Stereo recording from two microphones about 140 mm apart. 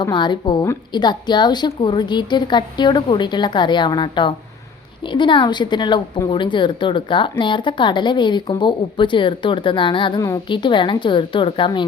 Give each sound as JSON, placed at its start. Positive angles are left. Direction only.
{"t": 0.0, "sound": "a woman's voice", "side_deg": 35}